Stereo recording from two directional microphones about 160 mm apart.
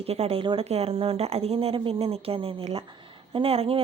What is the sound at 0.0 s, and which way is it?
A woman's voice, 40° right (ahead or behind).